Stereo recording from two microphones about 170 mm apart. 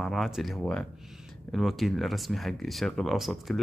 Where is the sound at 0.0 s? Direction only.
Centre (ahead or behind).